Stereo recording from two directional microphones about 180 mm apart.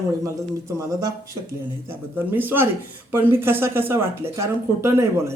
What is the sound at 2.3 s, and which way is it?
Speech, 10° right (ahead or behind).